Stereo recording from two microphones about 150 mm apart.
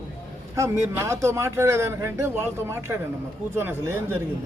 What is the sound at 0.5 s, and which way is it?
Speech, 20° right (ahead or behind).